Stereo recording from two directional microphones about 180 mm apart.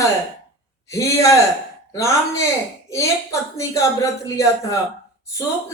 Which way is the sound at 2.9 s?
15° left (ahead or behind).